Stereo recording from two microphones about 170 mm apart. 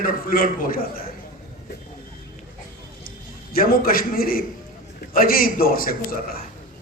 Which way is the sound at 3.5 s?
55° left (ahead or behind).